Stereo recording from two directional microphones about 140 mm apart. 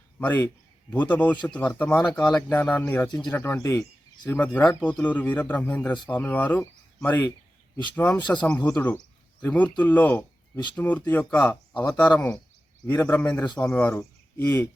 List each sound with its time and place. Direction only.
0.2 s a man's voice: 10° left (ahead or behind)